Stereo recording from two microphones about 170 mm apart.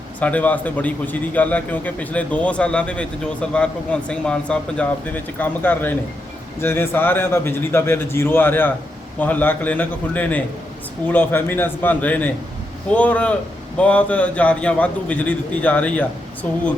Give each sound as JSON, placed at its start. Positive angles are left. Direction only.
{"t": 0.2, "sound": "a man's voice", "side_deg": 10}